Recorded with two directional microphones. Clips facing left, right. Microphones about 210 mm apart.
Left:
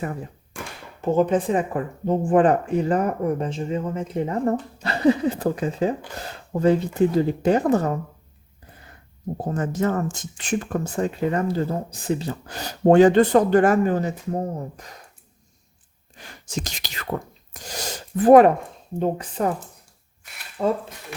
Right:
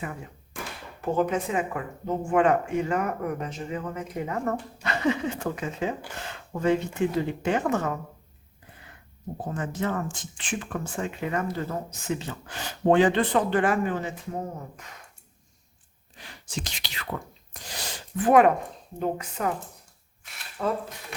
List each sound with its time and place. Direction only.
1.0 s speech: 25° left (ahead or behind)
9.4 s speech: 40° left (ahead or behind)
16.1 s speech: 45° left (ahead or behind)
20.6 s speech: 25° left (ahead or behind)